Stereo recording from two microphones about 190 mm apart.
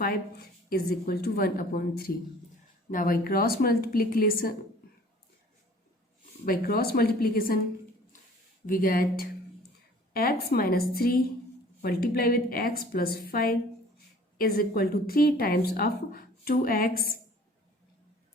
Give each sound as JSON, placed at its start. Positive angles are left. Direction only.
{"t": 0.0, "sound": "a woman's voice", "side_deg": 50}
{"t": 6.4, "sound": "a woman's voice", "side_deg": 50}
{"t": 8.6, "sound": "a woman's voice", "side_deg": 45}